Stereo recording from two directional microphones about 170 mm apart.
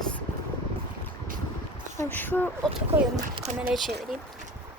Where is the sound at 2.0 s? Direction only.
10° left (ahead or behind).